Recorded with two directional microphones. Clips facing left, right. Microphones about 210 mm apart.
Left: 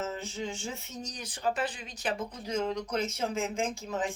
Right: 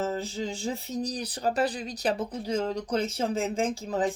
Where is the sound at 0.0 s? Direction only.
35° right (ahead or behind).